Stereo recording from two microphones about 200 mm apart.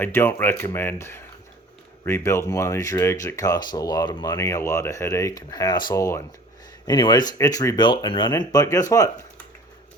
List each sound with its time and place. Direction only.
0.0 s speech: 10° left (ahead or behind)